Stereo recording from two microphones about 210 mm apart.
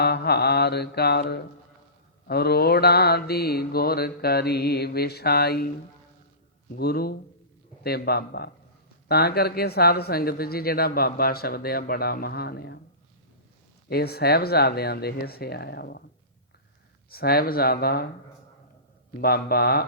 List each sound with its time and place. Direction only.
0.0 s speech: 50° left (ahead or behind)
6.7 s speech: 50° left (ahead or behind)
13.8 s speech: 50° left (ahead or behind)
17.1 s speech: 45° left (ahead or behind)
19.2 s speech: 45° left (ahead or behind)